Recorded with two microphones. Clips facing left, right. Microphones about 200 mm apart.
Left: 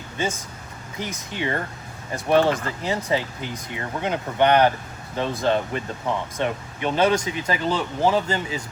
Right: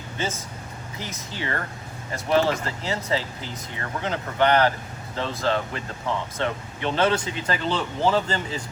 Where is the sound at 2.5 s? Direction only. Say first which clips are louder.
Left 2 dB; 15° left (ahead or behind).